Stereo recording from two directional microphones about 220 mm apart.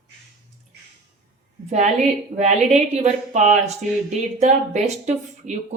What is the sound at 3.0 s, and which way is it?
Speech, 30° right (ahead or behind).